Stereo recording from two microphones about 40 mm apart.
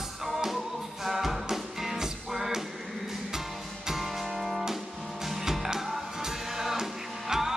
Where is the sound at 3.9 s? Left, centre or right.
Centre.